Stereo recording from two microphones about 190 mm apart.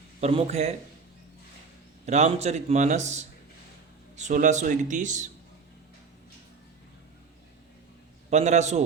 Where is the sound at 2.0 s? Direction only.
35° right (ahead or behind).